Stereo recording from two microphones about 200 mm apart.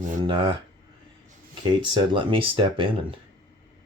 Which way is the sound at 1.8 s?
25° right (ahead or behind).